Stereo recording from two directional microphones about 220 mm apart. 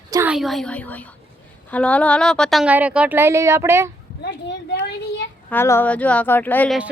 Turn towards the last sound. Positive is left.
turn(degrees=5)  # may be behind; listen again after turning